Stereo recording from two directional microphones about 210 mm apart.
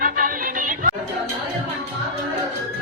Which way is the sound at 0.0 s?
45° right (ahead or behind).